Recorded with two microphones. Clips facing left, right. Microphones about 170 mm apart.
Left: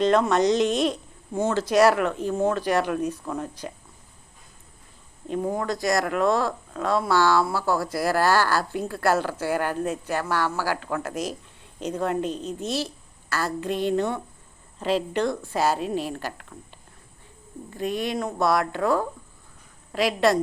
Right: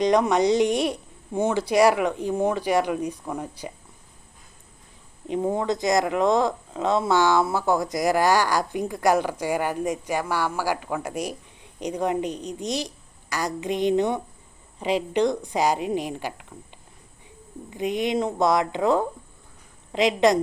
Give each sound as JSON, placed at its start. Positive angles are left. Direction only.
{"t": 0.0, "sound": "speech", "side_deg": -15}
{"t": 5.3, "sound": "speech", "side_deg": -20}
{"t": 17.7, "sound": "speech", "side_deg": -20}